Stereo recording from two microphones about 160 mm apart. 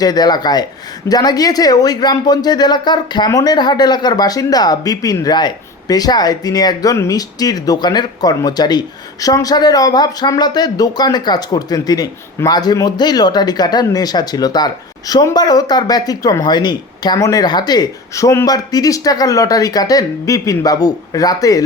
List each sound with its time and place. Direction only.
0.0 s speech: 25° left (ahead or behind)